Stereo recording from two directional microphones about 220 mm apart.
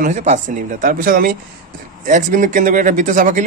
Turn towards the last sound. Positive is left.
turn(degrees=-35)  # may be behind; listen again after turning